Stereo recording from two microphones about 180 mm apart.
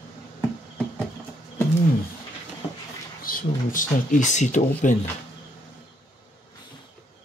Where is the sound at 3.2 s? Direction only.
50° left (ahead or behind).